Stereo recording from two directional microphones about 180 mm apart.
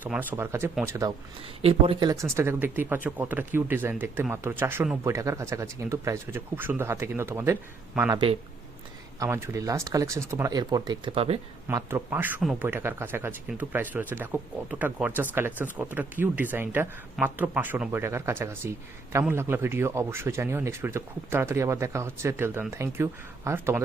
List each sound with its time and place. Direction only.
0.0 s speech: 10° right (ahead or behind)
1.6 s speech: 25° right (ahead or behind)
11.7 s speech: 15° right (ahead or behind)